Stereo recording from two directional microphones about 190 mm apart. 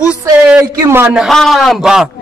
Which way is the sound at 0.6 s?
15° right (ahead or behind).